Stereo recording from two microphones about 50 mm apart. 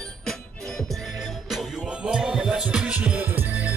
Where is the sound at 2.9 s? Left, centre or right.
Right.